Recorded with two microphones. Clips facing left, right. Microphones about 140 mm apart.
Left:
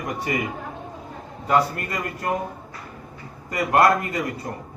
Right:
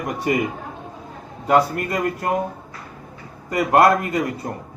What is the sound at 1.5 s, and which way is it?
Speech, 30° right (ahead or behind).